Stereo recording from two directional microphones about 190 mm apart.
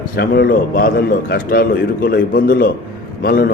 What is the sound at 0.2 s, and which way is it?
A man's voice, 55° left (ahead or behind).